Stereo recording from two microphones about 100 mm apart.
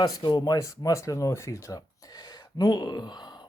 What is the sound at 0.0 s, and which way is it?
Speech, 45° left (ahead or behind).